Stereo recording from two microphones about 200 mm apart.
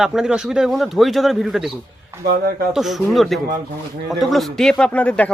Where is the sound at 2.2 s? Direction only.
50° right (ahead or behind).